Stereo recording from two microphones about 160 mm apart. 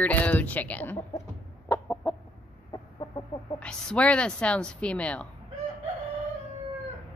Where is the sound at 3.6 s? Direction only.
5° left (ahead or behind).